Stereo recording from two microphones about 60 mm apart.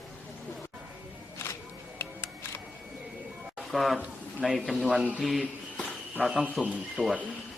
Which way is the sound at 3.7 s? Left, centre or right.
Centre.